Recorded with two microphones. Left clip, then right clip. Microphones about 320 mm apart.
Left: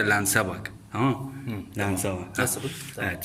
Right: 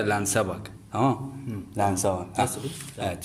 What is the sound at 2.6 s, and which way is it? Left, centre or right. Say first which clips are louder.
Speech: left 1 dB; centre.